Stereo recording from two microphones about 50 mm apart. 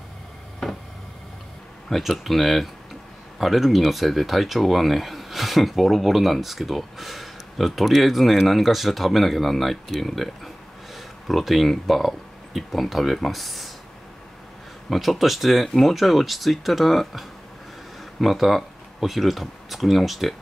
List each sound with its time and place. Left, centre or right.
1.9 s speech: centre
14.9 s speech: centre